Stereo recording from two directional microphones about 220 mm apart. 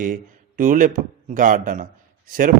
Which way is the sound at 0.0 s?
40° right (ahead or behind).